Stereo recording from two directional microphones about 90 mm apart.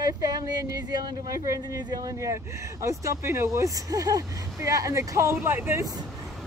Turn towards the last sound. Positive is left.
turn(degrees=-25)  # may be behind; listen again after turning